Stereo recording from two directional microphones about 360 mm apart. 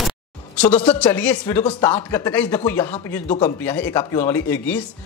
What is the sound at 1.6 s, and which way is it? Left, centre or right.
A man's voice, centre.